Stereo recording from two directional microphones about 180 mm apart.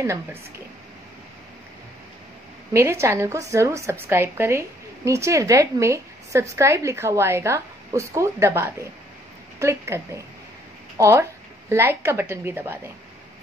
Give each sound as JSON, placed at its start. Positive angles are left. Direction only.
{"t": 0.0, "sound": "a woman's voice", "side_deg": -15}
{"t": 2.7, "sound": "a woman's voice", "side_deg": -15}